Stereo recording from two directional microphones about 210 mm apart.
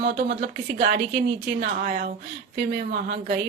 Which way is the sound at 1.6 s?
45° right (ahead or behind).